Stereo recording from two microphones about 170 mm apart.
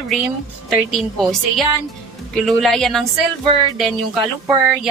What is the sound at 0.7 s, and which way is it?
Speech, centre (ahead or behind).